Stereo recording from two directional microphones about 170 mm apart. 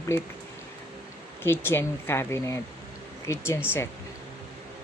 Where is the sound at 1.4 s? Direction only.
15° left (ahead or behind).